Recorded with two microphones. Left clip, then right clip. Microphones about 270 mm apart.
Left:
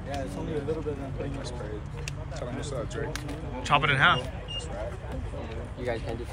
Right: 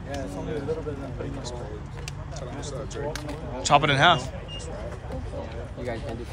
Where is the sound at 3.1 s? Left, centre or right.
Centre.